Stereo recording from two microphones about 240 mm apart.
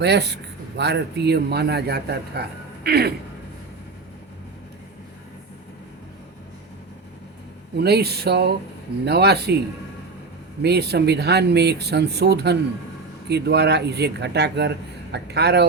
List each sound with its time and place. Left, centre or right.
0.0 s speech: right
7.8 s speech: right
10.6 s speech: right